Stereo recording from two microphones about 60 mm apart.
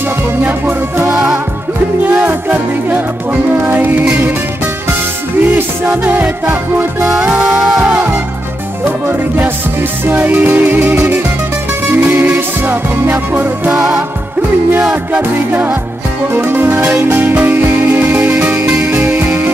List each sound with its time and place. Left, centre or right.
0.4 s music: right
2.1 s music: right
5.4 s music: right
7.4 s a sound: centre; by 8.2 s right
8.8 s music: right
12.0 s music: right
12.4 s music: right
15.5 s music: right
18.3 s music: centre
18.7 s music: right